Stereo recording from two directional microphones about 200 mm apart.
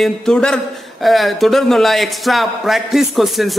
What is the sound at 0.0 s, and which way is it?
A man's voice, 5° left (ahead or behind).